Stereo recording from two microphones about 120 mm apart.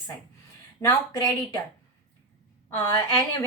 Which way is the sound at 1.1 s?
30° left (ahead or behind).